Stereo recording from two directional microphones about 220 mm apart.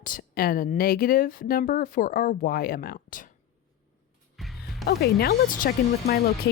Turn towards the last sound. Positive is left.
turn(degrees=45)  # may be behind; listen again after turning